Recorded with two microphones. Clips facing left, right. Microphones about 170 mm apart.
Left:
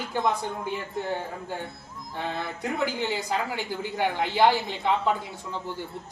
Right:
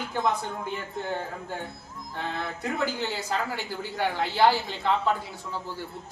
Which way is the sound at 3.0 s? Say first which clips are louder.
Left 2 dB; 15° left (ahead or behind).